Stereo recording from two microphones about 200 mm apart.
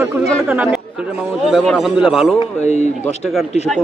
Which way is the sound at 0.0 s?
5° right (ahead or behind).